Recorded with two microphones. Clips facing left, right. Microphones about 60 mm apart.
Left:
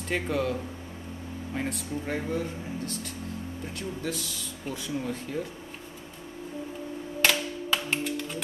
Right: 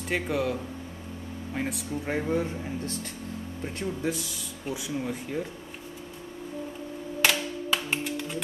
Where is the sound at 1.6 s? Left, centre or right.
Centre.